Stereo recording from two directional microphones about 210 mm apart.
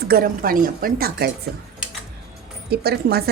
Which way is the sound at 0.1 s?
45° right (ahead or behind).